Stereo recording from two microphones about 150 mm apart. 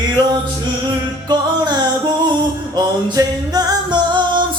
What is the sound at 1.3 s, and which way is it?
Music, 30° right (ahead or behind).